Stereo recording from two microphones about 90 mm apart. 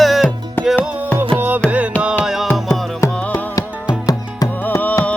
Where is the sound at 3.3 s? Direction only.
45° left (ahead or behind).